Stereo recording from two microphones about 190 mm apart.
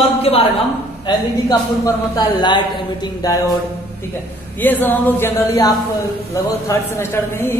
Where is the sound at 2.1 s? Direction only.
25° left (ahead or behind).